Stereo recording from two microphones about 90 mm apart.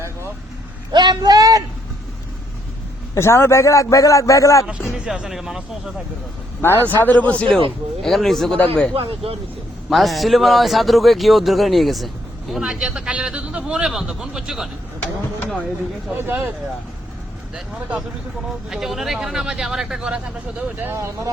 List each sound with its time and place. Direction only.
0.9 s speech: 50° right (ahead or behind)
3.2 s a man's voice: 30° left (ahead or behind)
4.6 s speech: 10° right (ahead or behind)
6.6 s a man's voice: 25° left (ahead or behind); by 8.5 s 5° left (ahead or behind)
8.5 s speech: 15° left (ahead or behind)
8.9 s speech: 90° right
9.9 s a man's voice: centre (ahead or behind)
16.1 s speech: 25° right (ahead or behind)
17.5 s speech: 10° right (ahead or behind); by 21.1 s 25° right (ahead or behind)